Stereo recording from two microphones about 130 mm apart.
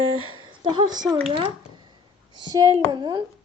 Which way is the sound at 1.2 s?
45° right (ahead or behind).